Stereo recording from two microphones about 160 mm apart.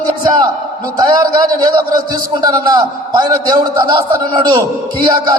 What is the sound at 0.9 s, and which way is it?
A man's voice, 25° right (ahead or behind).